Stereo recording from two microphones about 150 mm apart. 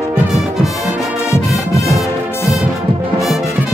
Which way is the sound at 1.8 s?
20° left (ahead or behind).